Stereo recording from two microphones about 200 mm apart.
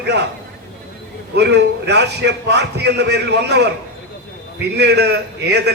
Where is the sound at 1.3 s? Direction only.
55° right (ahead or behind).